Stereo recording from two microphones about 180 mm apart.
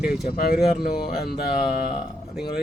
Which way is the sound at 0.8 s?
60° left (ahead or behind).